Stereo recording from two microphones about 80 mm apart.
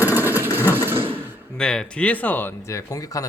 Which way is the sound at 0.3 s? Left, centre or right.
Right.